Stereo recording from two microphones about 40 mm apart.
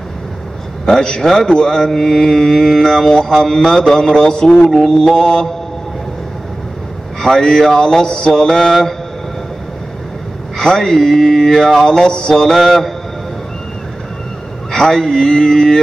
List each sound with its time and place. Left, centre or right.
0.8 s mantra: centre
7.2 s mantra: centre
10.6 s mantra: centre
12.5 s a man's voice: centre
14.7 s mantra: centre